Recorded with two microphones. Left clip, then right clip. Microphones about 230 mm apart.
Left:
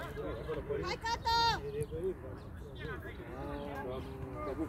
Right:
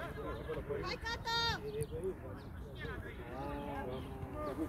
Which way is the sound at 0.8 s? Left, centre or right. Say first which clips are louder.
Left 5 dB; left.